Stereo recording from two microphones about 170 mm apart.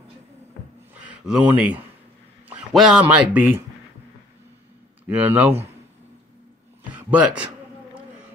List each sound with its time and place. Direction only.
1.0 s speech: 10° right (ahead or behind)
5.0 s speech: 10° right (ahead or behind)
6.9 s a man's voice: 10° right (ahead or behind)